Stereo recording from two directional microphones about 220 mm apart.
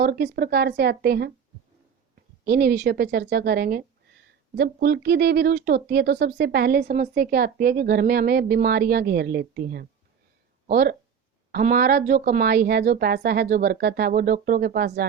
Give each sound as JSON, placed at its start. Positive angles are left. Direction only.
{"t": 0.0, "sound": "speech", "side_deg": -45}
{"t": 2.4, "sound": "speech", "side_deg": -45}